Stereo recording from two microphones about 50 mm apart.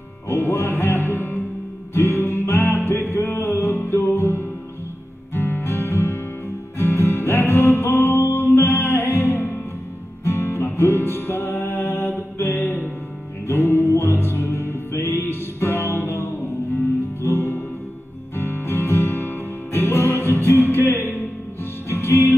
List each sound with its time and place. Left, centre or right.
0.3 s music: left
5.3 s music: left
12.4 s mantra: left
13.5 s music: left
21.8 s music: left